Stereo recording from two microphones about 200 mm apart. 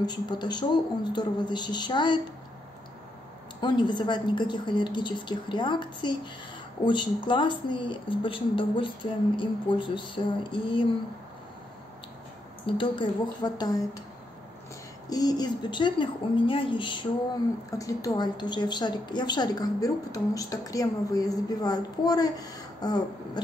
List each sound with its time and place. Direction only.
0.0 s a woman's voice: 20° left (ahead or behind)
3.6 s a woman's voice: 25° left (ahead or behind)
12.6 s a woman's voice: 25° left (ahead or behind)
15.0 s a woman's voice: 20° left (ahead or behind)